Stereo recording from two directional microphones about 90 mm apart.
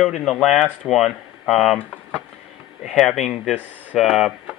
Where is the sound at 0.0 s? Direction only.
5° left (ahead or behind).